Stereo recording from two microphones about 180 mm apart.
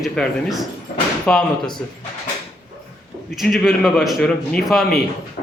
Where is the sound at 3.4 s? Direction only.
Centre (ahead or behind).